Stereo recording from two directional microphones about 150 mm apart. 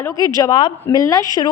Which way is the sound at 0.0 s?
20° left (ahead or behind).